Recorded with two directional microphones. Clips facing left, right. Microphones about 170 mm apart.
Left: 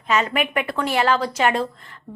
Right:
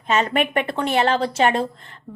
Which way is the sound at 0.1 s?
30° right (ahead or behind).